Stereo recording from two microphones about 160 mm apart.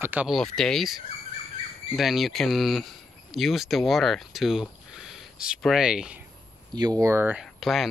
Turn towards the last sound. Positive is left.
turn(degrees=0)  # may be behind; listen again after turning